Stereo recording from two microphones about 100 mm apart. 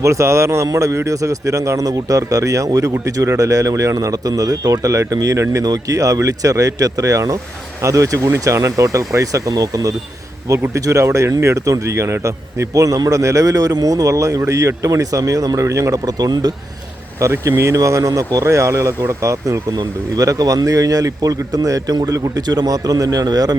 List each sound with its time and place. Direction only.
0.0 s speech: 30° right (ahead or behind)
17.2 s speech: 30° right (ahead or behind)